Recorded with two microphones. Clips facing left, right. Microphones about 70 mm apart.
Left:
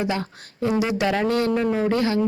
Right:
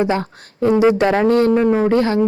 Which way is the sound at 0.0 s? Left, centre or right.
Right.